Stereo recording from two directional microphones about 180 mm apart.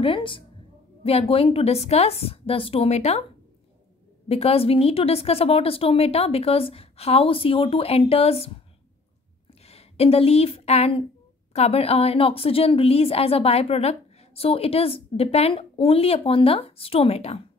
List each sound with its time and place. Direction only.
0.0 s a woman's voice: 30° left (ahead or behind)
4.3 s a woman's voice: 35° left (ahead or behind)
9.6 s a woman's voice: 35° left (ahead or behind)